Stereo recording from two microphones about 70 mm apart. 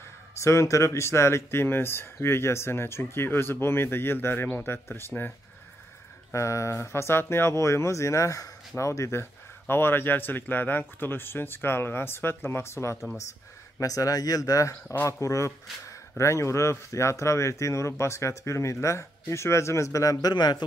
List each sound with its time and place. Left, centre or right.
0.4 s speech: left
6.3 s speech: left
13.7 s speech: left